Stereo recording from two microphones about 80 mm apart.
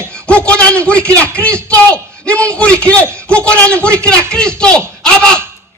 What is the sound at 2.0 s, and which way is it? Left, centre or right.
A man's voice, centre.